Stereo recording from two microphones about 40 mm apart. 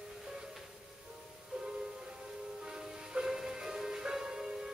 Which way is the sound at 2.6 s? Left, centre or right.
Centre.